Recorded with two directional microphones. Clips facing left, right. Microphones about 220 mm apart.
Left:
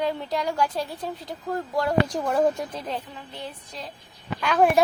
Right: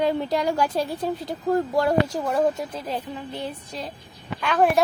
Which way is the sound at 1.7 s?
5° right (ahead or behind).